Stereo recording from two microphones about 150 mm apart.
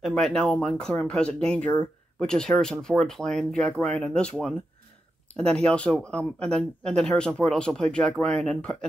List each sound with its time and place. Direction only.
0.0 s speech: 5° left (ahead or behind)